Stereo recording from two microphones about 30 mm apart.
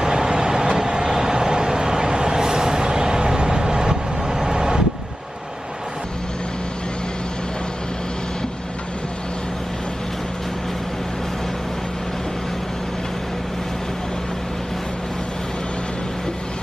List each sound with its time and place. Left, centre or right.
0.0 s vehicle: right